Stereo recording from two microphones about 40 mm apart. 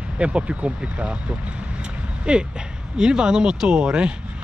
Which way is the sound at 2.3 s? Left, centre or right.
Right.